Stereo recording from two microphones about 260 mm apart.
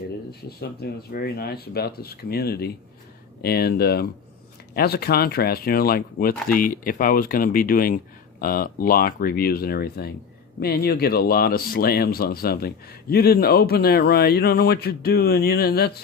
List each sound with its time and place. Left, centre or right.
0.3 s speech: left